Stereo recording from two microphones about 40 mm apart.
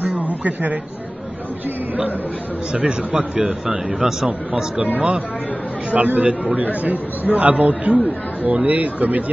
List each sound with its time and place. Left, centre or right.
0.1 s a sound: right
2.7 s a man's voice: right
4.9 s speech: right